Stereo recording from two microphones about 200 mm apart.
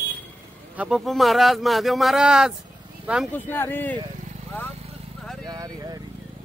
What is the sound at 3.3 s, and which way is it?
Speech, 10° left (ahead or behind).